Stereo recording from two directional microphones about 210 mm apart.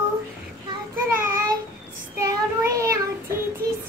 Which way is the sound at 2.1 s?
15° right (ahead or behind).